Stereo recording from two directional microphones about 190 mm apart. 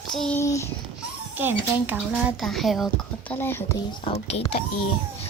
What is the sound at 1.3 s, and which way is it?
Speech, 10° right (ahead or behind).